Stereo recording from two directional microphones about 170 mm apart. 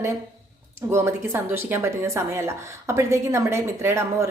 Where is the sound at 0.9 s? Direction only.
15° right (ahead or behind).